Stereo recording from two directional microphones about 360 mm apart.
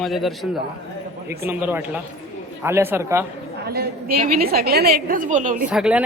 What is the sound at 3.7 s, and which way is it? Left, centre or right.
A woman's voice, right.